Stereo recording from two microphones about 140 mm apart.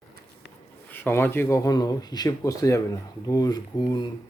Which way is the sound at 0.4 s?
15° left (ahead or behind).